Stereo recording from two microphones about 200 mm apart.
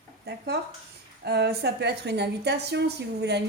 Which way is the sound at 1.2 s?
55° right (ahead or behind).